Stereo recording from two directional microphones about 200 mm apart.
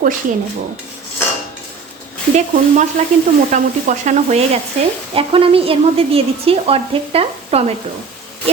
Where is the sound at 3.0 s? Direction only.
35° right (ahead or behind).